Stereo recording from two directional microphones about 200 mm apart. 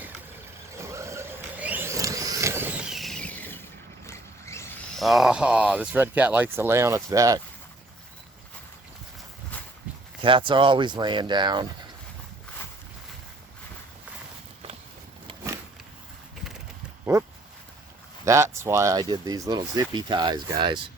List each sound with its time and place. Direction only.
0.8 s a sound: 15° right (ahead or behind); by 3.6 s 10° left (ahead or behind)
4.0 s vehicle: 15° left (ahead or behind)
4.9 s speech: centre (ahead or behind); by 7.4 s 15° right (ahead or behind)
10.2 s speech: 25° right (ahead or behind)
18.3 s speech: 15° right (ahead or behind)